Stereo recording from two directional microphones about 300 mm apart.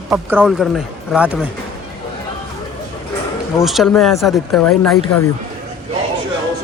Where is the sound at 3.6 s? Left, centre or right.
Centre.